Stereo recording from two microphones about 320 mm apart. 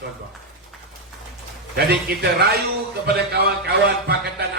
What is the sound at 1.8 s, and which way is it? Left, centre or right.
Speech, right.